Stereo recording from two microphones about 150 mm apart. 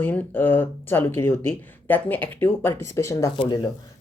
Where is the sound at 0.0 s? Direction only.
10° left (ahead or behind).